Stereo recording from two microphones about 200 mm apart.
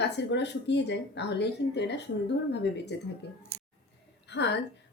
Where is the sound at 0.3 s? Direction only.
60° left (ahead or behind).